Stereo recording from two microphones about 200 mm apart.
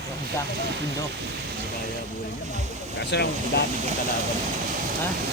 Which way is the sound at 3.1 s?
55° left (ahead or behind).